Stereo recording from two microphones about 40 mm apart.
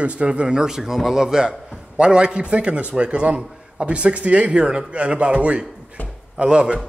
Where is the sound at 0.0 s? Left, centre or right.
Right.